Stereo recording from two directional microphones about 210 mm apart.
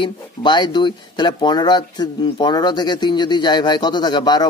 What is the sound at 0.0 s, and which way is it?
A man's voice, 20° left (ahead or behind).